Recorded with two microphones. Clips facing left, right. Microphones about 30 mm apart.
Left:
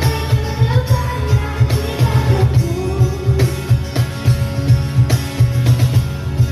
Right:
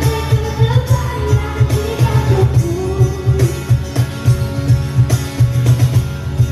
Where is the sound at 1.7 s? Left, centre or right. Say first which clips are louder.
Right 2 dB; left.